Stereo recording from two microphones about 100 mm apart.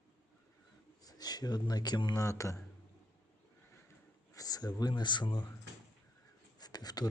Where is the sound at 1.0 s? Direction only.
40° left (ahead or behind).